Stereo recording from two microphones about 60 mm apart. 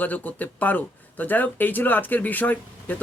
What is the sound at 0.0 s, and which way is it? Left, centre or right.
Speech, left.